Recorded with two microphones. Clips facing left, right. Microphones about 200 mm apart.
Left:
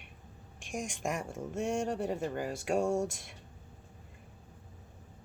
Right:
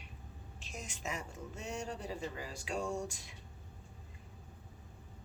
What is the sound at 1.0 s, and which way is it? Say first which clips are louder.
Speech: left 4 dB; 50° left (ahead or behind).